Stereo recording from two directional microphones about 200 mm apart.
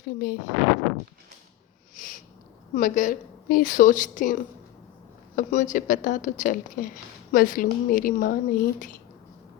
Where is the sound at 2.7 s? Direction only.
40° left (ahead or behind).